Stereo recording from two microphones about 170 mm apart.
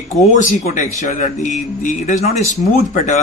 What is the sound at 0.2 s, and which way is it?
Speech, 45° left (ahead or behind).